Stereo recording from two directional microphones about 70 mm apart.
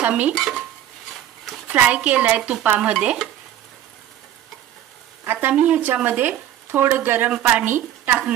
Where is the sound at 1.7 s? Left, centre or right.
Centre.